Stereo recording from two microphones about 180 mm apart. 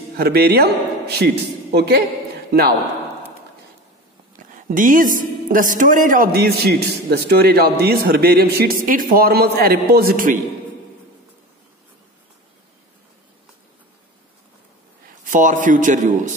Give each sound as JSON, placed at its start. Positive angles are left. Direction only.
{"t": 0.2, "sound": "a man's voice", "side_deg": -60}
{"t": 4.6, "sound": "speech", "side_deg": -45}
{"t": 15.2, "sound": "speech", "side_deg": -45}